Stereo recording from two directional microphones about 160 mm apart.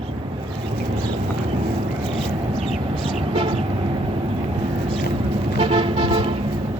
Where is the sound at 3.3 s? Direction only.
35° right (ahead or behind).